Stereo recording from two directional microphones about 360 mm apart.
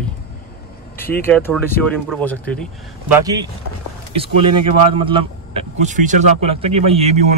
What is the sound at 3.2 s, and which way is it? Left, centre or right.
Speech, centre.